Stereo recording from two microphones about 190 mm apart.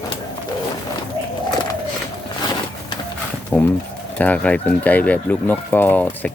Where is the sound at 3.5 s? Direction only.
5° left (ahead or behind).